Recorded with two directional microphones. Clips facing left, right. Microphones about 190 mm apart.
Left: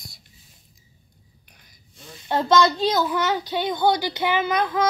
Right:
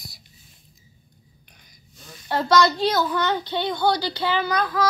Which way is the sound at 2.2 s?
20° left (ahead or behind).